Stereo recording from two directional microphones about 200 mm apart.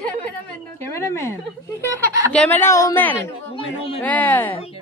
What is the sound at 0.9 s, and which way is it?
Speech, 15° left (ahead or behind).